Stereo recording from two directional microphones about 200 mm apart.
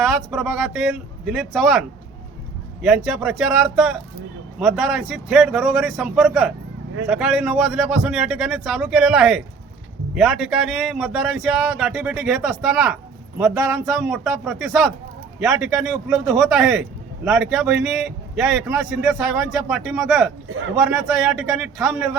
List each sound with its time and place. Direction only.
0.0 s speech: centre (ahead or behind)
2.8 s speech: centre (ahead or behind)
13.4 s speech: 15° right (ahead or behind)
13.8 s speech: centre (ahead or behind)
20.5 s a man's voice: 90° right
20.7 s speech: centre (ahead or behind)